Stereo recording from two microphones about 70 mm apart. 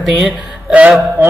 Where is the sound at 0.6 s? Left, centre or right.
Centre.